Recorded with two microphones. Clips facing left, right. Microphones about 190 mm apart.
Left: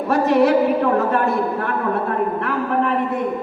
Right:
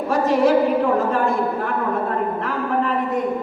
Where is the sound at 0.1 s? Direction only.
65° left (ahead or behind).